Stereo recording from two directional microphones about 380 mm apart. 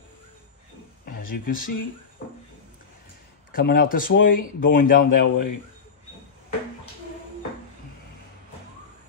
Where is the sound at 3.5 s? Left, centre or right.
Left.